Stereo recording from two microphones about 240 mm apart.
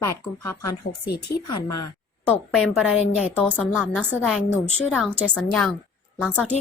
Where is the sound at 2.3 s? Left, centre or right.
Centre.